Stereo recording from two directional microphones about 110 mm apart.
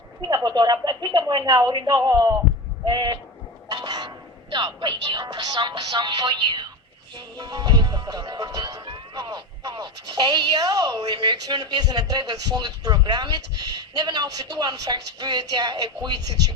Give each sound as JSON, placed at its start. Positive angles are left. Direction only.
{"t": 0.3, "sound": "speech", "side_deg": -35}
{"t": 2.8, "sound": "speech", "side_deg": -45}